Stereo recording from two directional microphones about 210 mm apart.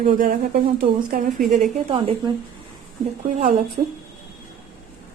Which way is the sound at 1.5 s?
30° right (ahead or behind).